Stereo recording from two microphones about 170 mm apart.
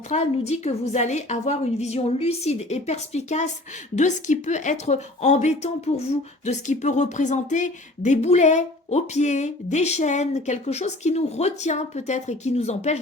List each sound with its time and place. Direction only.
0.1 s a woman's voice: 40° left (ahead or behind)